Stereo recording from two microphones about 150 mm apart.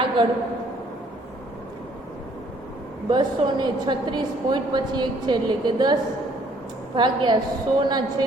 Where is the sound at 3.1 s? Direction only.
30° right (ahead or behind).